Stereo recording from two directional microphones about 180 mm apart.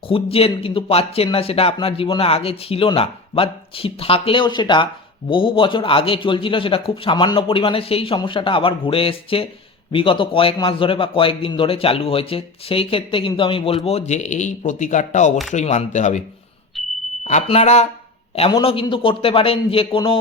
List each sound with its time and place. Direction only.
0.1 s a man's voice: 35° left (ahead or behind)
16.8 s a sound: centre (ahead or behind)
17.2 s a man's voice: 40° left (ahead or behind)